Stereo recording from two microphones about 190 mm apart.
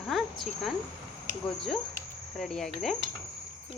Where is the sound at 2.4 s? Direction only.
Centre (ahead or behind).